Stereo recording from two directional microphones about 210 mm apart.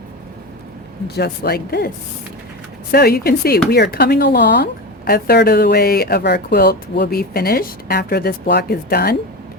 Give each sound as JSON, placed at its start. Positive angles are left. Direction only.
{"t": 1.0, "sound": "a woman's voice", "side_deg": 50}
{"t": 2.9, "sound": "a woman's voice", "side_deg": 50}